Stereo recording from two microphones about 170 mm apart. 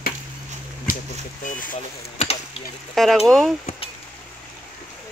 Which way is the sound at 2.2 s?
35° left (ahead or behind).